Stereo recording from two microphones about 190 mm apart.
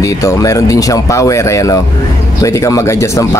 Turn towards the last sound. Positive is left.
turn(degrees=15)  # may be behind; listen again after turning